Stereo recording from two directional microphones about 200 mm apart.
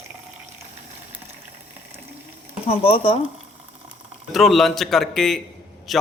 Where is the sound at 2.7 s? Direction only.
30° left (ahead or behind).